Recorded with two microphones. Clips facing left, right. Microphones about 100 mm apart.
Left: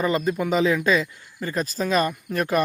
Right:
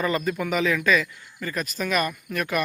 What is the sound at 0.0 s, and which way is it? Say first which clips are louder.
Speech: left 2 dB; 20° left (ahead or behind).